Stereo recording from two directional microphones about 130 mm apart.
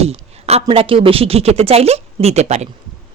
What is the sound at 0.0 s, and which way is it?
A woman's voice, 55° right (ahead or behind).